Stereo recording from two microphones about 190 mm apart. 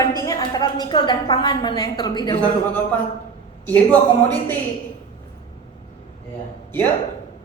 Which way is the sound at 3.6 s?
10° left (ahead or behind).